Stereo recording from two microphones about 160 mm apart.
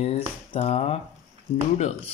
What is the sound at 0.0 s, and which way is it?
Speech, 35° left (ahead or behind).